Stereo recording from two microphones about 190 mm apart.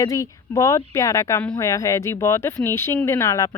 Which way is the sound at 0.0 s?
15° left (ahead or behind).